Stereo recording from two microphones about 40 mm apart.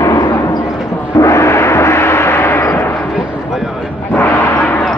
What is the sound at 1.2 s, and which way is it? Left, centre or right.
Gong, left.